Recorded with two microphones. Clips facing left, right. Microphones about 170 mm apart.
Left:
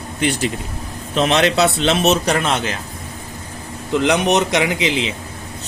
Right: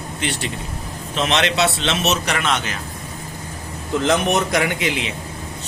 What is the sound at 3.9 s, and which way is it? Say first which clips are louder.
Speech: left 2 dB; 15° left (ahead or behind).